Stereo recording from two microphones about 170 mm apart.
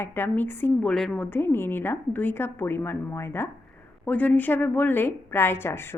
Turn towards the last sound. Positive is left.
turn(degrees=15)  # may be behind; listen again after turning